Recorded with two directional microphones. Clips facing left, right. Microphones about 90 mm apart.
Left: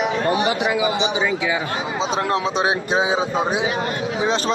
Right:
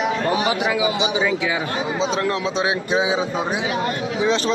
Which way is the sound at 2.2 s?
25° left (ahead or behind).